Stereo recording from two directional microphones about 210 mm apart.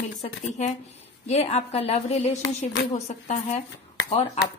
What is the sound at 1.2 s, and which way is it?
A woman's voice, 30° left (ahead or behind).